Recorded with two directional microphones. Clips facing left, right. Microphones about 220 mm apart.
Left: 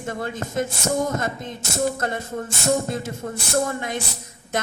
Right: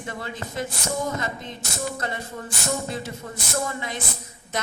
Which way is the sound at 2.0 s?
45° left (ahead or behind).